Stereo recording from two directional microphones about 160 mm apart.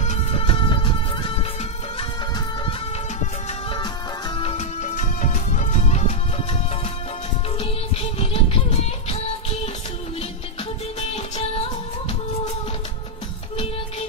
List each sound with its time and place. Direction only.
0.0 s music: 40° left (ahead or behind)
4.4 s music: 40° left (ahead or behind)
7.5 s music: 40° left (ahead or behind)
11.0 s music: 40° left (ahead or behind)